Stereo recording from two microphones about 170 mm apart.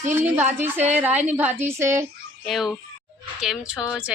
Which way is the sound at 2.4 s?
Centre (ahead or behind).